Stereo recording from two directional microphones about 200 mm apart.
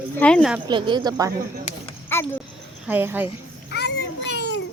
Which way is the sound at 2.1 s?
10° left (ahead or behind).